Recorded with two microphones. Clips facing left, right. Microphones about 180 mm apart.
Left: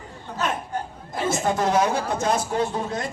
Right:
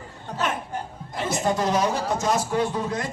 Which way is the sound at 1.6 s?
50° left (ahead or behind).